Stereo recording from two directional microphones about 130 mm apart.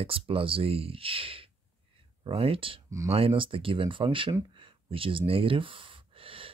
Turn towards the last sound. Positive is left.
turn(degrees=-45)  # may be behind; listen again after turning